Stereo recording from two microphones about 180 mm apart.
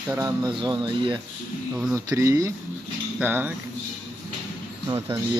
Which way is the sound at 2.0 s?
15° right (ahead or behind).